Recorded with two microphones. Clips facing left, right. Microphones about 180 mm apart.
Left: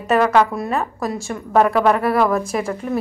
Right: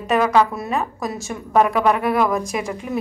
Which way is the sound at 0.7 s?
Centre (ahead or behind).